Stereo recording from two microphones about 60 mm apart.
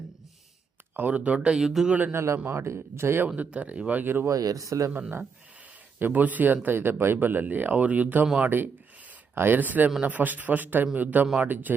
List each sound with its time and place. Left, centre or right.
0.9 s speech: right
1.4 s speech: centre
2.1 s speech: right
3.2 s speech: right
4.3 s speech: right
6.0 s speech: right